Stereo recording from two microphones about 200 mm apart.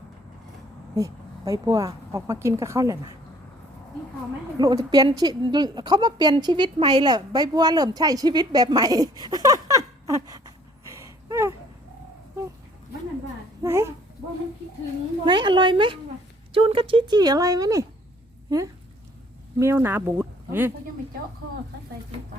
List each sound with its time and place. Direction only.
0.9 s speech: 15° right (ahead or behind)
4.5 s a woman's voice: 20° right (ahead or behind)
13.6 s a child's voice: 15° right (ahead or behind)
15.2 s speech: 25° right (ahead or behind)
19.5 s speech: 15° right (ahead or behind)